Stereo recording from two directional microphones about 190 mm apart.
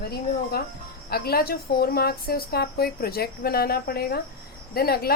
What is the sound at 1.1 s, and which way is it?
A woman's voice, 55° left (ahead or behind).